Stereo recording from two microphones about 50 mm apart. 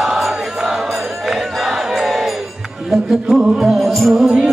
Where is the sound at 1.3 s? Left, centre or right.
Centre.